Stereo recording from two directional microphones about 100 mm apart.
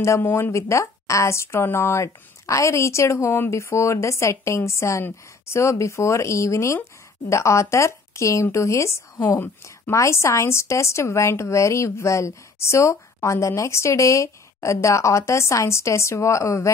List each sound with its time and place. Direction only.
0.0 s speech: 25° left (ahead or behind)